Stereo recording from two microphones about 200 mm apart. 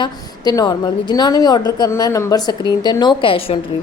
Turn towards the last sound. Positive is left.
turn(degrees=25)  # may be behind; listen again after turning